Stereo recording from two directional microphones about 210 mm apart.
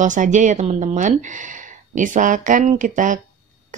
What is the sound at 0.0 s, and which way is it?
Speech, 35° right (ahead or behind).